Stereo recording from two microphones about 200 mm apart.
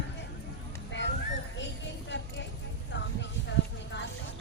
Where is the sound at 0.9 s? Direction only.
65° left (ahead or behind).